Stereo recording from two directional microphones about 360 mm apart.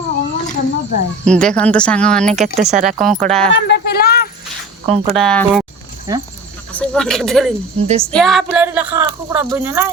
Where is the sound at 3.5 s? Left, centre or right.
Left.